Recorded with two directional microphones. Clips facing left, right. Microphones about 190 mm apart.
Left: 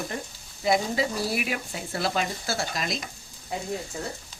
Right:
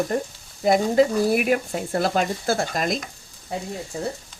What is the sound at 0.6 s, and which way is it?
Speech, 50° right (ahead or behind).